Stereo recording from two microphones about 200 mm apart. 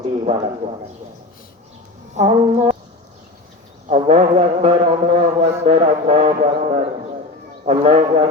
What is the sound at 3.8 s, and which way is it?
A man's voice, 30° right (ahead or behind).